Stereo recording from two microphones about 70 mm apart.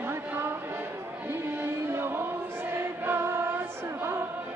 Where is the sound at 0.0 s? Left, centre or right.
Right.